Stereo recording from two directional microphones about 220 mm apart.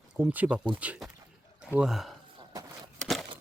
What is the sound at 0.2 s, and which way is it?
Speech, 5° right (ahead or behind).